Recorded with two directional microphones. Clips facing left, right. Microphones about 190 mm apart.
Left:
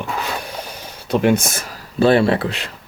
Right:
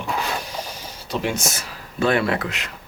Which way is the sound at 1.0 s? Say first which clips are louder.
Left 9 dB; 55° left (ahead or behind).